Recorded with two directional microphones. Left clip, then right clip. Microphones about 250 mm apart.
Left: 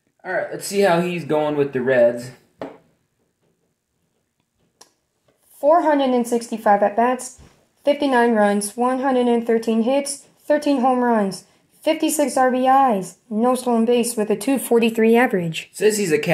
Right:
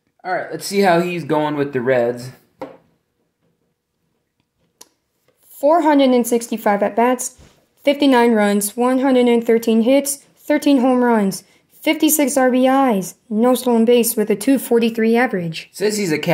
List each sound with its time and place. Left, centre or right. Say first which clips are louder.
0.2 s a woman's voice: right 2 dB; right
5.5 s a woman's voice: right 2 dB; right; by 15.7 s centre
15.7 s a woman's voice: left 1 dB; right